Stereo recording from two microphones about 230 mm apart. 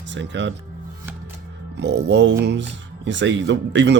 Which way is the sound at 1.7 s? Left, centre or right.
Right.